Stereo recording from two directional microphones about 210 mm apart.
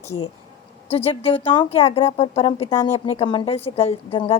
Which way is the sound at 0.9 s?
30° left (ahead or behind).